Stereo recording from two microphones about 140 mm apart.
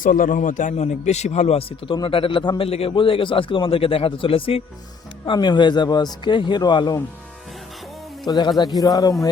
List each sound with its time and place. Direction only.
0.0 s a man's voice: 75° left (ahead or behind); by 7.0 s 30° left (ahead or behind)
8.3 s speech: 30° left (ahead or behind)